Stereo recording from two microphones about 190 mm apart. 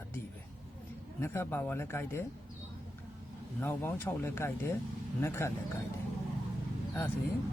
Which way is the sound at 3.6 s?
10° left (ahead or behind).